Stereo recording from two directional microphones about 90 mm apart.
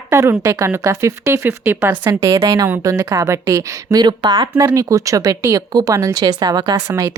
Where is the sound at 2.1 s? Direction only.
35° right (ahead or behind).